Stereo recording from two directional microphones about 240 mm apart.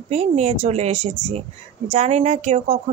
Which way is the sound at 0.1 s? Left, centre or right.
Right.